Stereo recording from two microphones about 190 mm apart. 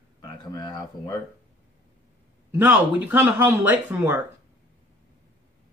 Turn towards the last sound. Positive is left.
turn(degrees=-10)  # may be behind; listen again after turning